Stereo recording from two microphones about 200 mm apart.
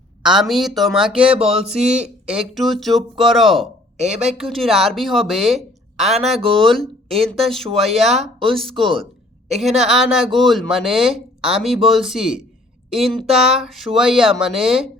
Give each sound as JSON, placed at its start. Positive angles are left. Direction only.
{"t": 0.2, "sound": "speech", "side_deg": 0}
{"t": 1.8, "sound": "speech", "side_deg": -35}
{"t": 2.2, "sound": "speech", "side_deg": -5}